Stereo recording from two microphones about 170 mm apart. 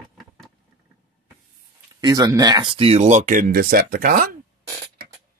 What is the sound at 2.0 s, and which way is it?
Speech, 20° right (ahead or behind).